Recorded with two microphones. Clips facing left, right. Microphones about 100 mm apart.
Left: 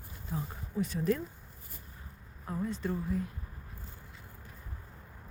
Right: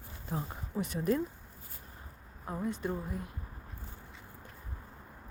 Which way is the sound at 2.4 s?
20° right (ahead or behind).